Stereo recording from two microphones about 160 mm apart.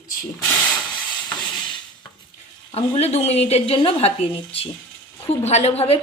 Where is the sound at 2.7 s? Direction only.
40° left (ahead or behind).